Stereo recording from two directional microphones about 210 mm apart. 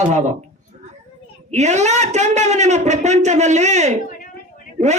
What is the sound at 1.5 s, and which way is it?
Speech, 35° right (ahead or behind).